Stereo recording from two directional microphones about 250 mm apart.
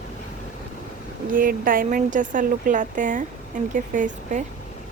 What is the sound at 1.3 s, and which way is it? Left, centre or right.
Speech, right.